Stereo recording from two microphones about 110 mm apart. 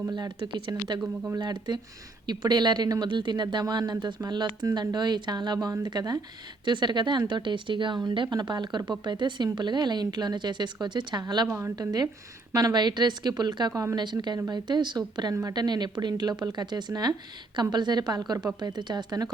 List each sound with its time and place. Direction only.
0.1 s speech: 45° right (ahead or behind)